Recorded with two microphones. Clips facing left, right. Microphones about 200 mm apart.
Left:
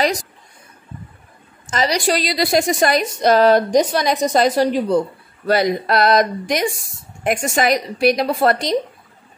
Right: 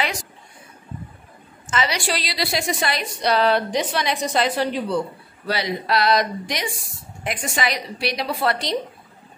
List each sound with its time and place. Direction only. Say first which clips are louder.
1.7 s a woman's voice: left 5 dB; 40° left (ahead or behind)